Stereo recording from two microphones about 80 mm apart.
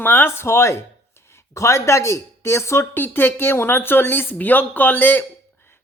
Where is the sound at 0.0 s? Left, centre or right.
Left.